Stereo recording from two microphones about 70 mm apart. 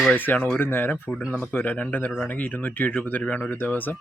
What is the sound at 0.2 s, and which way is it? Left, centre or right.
Speech, left.